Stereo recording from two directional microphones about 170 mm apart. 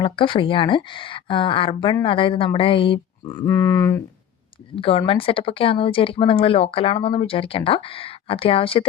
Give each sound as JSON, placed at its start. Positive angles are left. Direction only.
{"t": 0.0, "sound": "speech", "side_deg": 30}
{"t": 4.7, "sound": "speech", "side_deg": 35}